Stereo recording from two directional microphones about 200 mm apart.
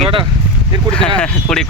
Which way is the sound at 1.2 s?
5° left (ahead or behind).